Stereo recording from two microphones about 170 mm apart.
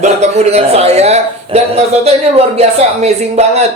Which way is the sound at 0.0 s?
40° right (ahead or behind).